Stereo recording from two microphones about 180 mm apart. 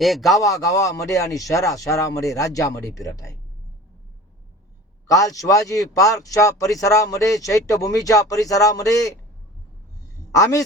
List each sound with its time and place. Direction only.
0.0 s a man's voice: centre (ahead or behind)
0.4 s speech: 20° left (ahead or behind)
5.0 s speech: 20° left (ahead or behind)
10.3 s speech: 20° left (ahead or behind)